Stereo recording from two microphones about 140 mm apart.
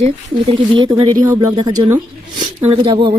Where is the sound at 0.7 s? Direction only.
35° right (ahead or behind).